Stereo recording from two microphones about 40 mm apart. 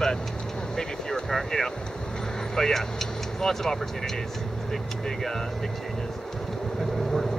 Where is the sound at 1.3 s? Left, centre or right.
Centre.